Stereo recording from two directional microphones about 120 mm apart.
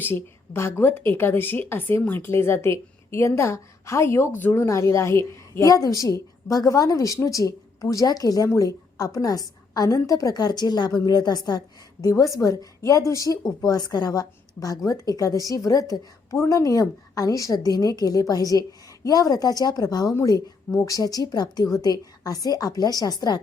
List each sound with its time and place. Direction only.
0.0 s a woman's voice: 20° left (ahead or behind)